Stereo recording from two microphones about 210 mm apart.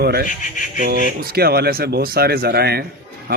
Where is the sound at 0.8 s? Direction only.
45° right (ahead or behind).